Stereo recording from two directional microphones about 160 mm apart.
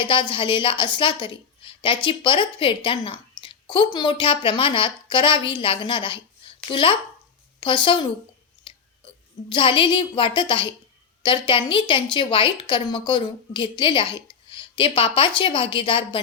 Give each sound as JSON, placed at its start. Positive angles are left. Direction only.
{"t": 0.0, "sound": "a woman's voice", "side_deg": 30}
{"t": 8.7, "sound": "whispering", "side_deg": 30}
{"t": 9.5, "sound": "a woman's voice", "side_deg": 30}